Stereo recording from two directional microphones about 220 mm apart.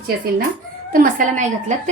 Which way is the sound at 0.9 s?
40° right (ahead or behind).